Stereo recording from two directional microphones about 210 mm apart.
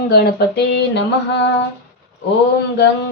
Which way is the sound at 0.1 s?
50° left (ahead or behind).